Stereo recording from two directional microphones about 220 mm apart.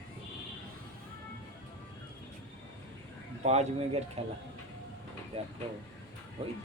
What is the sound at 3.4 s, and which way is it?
Speech, 30° right (ahead or behind).